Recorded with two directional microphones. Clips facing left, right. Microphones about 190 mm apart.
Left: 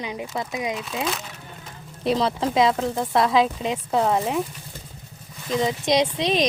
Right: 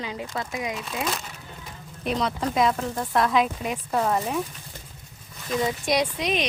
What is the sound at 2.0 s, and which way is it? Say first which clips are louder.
Speech: left 4 dB; 30° left (ahead or behind).